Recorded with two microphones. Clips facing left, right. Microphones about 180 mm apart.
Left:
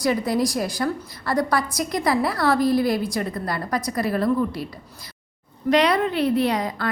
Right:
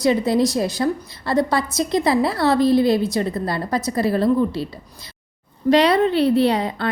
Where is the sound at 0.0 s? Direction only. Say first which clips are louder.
Right 4 dB; 25° right (ahead or behind).